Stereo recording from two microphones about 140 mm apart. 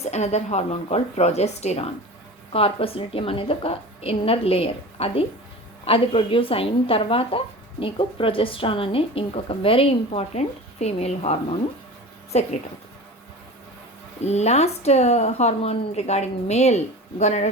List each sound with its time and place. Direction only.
0.0 s a woman's voice: 50° left (ahead or behind)
14.3 s a woman's voice: 50° left (ahead or behind)